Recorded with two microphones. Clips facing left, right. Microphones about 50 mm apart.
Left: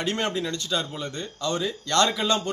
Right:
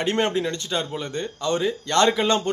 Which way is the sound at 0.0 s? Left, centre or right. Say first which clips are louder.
Right 4 dB; right.